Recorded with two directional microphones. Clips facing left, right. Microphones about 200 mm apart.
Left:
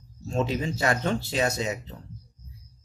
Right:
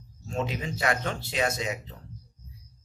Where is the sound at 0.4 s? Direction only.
35° left (ahead or behind).